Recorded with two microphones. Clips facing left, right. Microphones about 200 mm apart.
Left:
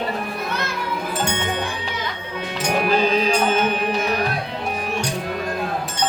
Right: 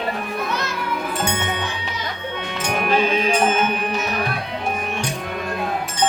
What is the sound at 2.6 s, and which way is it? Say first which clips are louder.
Music: left 1 dB; 35° left (ahead or behind).